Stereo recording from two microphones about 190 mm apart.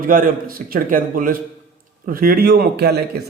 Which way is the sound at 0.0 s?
45° right (ahead or behind).